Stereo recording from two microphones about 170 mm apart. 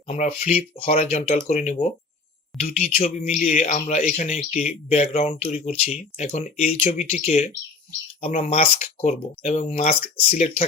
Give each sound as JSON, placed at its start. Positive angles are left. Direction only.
{"t": 0.1, "sound": "a man's voice", "side_deg": 45}
{"t": 2.5, "sound": "speech", "side_deg": 0}
{"t": 3.0, "sound": "a man's voice", "side_deg": 40}